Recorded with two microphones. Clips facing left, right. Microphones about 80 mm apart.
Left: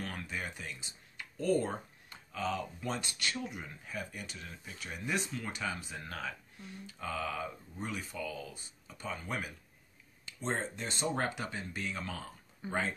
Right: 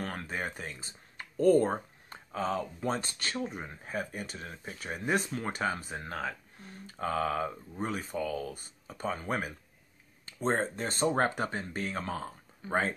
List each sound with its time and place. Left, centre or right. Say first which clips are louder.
0.0 s speech: right 4 dB; right